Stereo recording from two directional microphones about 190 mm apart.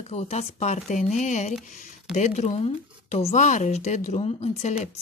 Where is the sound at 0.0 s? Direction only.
35° left (ahead or behind).